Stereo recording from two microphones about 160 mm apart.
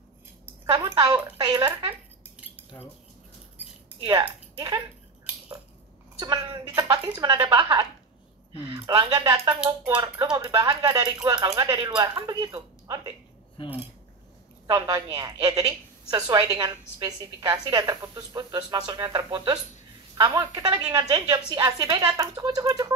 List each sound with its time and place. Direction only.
0.7 s a woman's voice: 25° right (ahead or behind)
1.9 s dishes: 10° right (ahead or behind)
4.2 s speech: 20° right (ahead or behind)
6.1 s a woman's voice: 25° right (ahead or behind)
14.7 s a woman's voice: 25° right (ahead or behind)